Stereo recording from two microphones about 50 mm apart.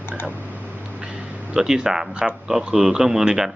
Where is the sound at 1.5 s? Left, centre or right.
Centre.